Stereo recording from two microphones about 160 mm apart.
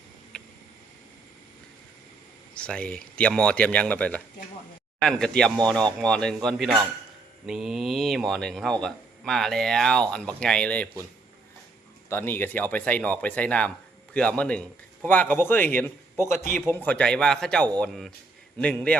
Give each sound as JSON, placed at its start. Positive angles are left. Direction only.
{"t": 0.3, "sound": "a sound", "side_deg": 5}
{"t": 2.6, "sound": "speech", "side_deg": 5}
{"t": 12.0, "sound": "speech", "side_deg": 15}